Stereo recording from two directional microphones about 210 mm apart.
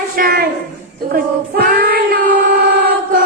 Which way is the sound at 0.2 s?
45° right (ahead or behind).